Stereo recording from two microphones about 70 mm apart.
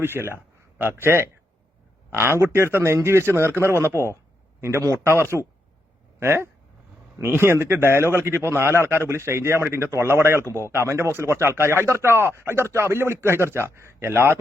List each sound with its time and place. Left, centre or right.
0.0 s a man's voice: right